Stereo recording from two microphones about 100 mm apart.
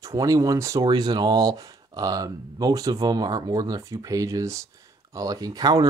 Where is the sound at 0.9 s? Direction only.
45° right (ahead or behind).